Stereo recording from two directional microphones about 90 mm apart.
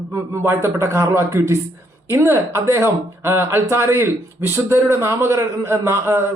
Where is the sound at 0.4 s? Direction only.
30° right (ahead or behind).